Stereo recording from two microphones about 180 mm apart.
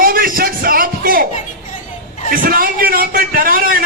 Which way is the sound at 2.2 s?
50° right (ahead or behind).